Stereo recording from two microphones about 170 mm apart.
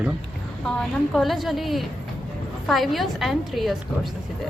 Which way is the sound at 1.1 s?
Centre (ahead or behind).